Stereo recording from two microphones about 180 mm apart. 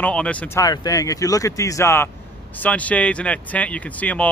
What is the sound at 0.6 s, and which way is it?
Speech, 20° left (ahead or behind).